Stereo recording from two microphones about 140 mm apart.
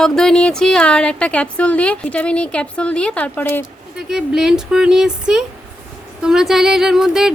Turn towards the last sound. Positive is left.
turn(degrees=-5)  # may be behind; listen again after turning